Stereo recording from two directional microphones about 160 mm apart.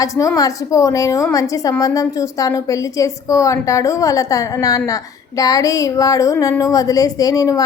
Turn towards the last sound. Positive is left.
turn(degrees=20)  # may be behind; listen again after turning